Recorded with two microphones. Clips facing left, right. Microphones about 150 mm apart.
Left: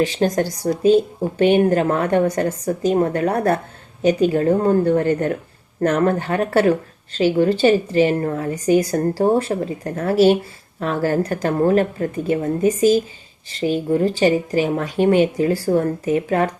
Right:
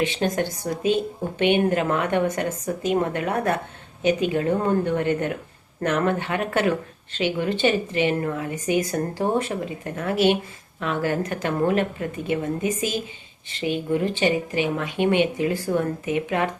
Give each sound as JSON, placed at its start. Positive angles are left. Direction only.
{"t": 0.0, "sound": "speech", "side_deg": 35}